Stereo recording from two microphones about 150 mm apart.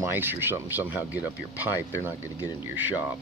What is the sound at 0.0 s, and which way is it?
Speech, 15° right (ahead or behind).